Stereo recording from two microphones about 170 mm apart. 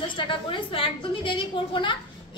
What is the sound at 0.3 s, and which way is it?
A woman's voice, 30° left (ahead or behind).